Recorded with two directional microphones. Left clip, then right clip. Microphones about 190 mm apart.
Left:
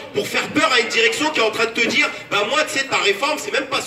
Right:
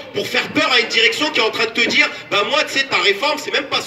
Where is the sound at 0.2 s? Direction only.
30° right (ahead or behind).